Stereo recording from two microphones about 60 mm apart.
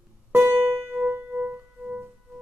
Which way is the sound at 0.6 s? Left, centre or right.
Right.